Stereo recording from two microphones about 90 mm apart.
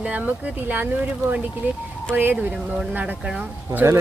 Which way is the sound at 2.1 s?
20° right (ahead or behind).